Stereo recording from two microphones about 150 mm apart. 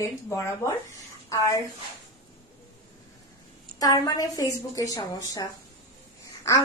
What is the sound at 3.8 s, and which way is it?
A woman's voice, 25° left (ahead or behind).